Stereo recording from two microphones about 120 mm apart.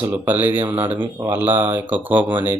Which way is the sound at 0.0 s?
15° right (ahead or behind).